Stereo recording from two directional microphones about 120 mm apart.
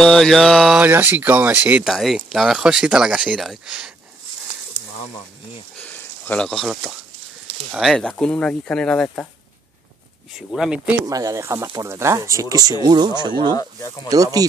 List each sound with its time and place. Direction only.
0.0 s mantra: 5° left (ahead or behind)
0.7 s speech: 15° right (ahead or behind)
1.9 s speech: centre (ahead or behind)
5.9 s a sound: 15° left (ahead or behind)
7.7 s speech: centre (ahead or behind)
10.3 s mantra: 5° right (ahead or behind)
11.1 s speech: 30° right (ahead or behind)
13.6 s speech: 25° left (ahead or behind)
14.0 s speech: 30° right (ahead or behind)